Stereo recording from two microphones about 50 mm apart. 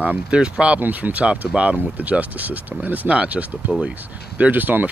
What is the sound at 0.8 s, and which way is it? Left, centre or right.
Speech, right.